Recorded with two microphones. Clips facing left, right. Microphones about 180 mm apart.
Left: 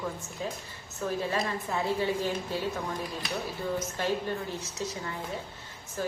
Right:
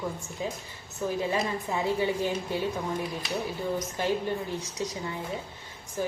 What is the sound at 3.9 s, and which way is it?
A woman's voice, 15° right (ahead or behind).